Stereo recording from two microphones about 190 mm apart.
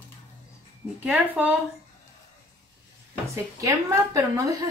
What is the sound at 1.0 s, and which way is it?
Speech, 5° right (ahead or behind).